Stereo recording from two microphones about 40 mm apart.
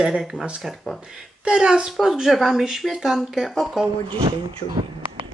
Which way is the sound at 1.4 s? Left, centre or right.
Right.